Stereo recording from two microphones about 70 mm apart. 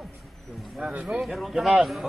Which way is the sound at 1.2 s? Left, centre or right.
Centre.